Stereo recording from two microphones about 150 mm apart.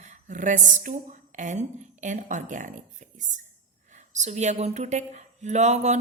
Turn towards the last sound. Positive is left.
turn(degrees=-50)  # may be behind; listen again after turning